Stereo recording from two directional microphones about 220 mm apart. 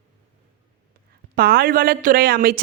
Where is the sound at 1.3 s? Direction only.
45° right (ahead or behind).